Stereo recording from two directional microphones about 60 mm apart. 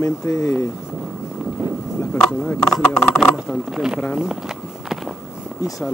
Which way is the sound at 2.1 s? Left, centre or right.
Centre.